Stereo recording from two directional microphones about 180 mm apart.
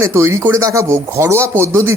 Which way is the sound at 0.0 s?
15° right (ahead or behind).